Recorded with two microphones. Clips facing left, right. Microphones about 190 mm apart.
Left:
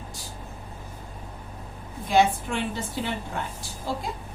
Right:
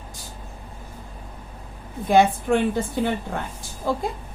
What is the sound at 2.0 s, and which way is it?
A woman's voice, 55° right (ahead or behind).